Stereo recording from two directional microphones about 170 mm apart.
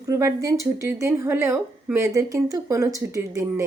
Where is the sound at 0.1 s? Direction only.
15° right (ahead or behind).